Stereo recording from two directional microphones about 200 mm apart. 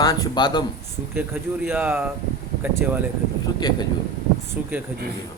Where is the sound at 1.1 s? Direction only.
10° right (ahead or behind).